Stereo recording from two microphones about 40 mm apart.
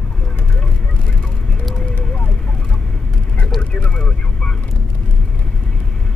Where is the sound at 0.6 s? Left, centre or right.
Left.